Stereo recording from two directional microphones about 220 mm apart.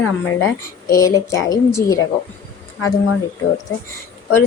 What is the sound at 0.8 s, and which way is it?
Speech, 15° left (ahead or behind).